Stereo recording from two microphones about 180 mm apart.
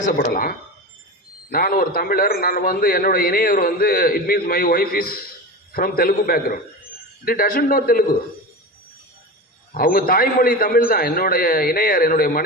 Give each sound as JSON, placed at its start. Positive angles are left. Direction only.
{"t": 0.0, "sound": "a man's voice", "side_deg": 50}
{"t": 9.7, "sound": "a man's voice", "side_deg": 55}